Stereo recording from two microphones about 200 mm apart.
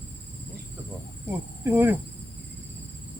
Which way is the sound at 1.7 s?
10° right (ahead or behind).